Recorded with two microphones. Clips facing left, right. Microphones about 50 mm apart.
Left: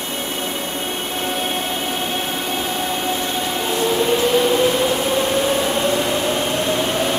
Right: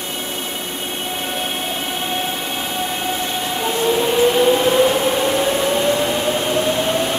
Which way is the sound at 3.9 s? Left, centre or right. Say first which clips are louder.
Right 2 dB; centre.